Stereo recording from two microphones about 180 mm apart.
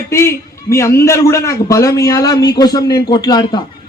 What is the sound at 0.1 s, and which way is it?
A man's voice, 15° left (ahead or behind).